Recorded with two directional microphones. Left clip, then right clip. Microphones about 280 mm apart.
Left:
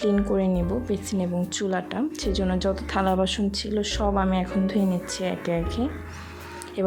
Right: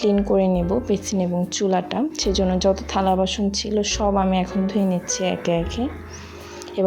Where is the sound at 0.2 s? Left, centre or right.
Centre.